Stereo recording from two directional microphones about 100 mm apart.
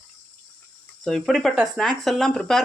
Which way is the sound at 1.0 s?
5° left (ahead or behind).